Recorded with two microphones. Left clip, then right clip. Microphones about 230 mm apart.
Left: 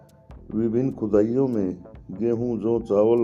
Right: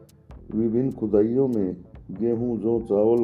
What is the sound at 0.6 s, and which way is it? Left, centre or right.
Speech, left.